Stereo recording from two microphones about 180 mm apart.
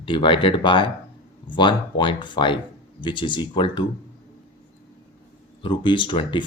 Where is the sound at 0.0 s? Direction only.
30° left (ahead or behind).